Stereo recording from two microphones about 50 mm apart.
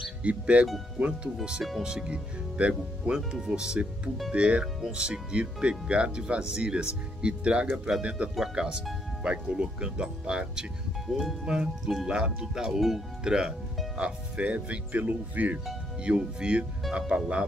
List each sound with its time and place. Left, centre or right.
0.2 s speech: right
8.0 s speech: right
11.1 s speech: centre
11.4 s speech: centre; by 15.6 s right
16.0 s speech: right